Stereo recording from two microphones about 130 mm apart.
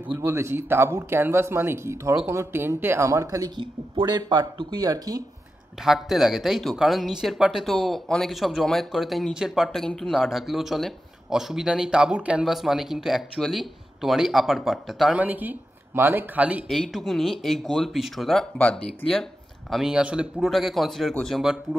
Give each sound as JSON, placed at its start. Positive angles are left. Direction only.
{"t": 0.1, "sound": "speech", "side_deg": -20}
{"t": 5.9, "sound": "speech", "side_deg": 0}
{"t": 15.2, "sound": "speech", "side_deg": -15}
{"t": 16.6, "sound": "speech", "side_deg": 0}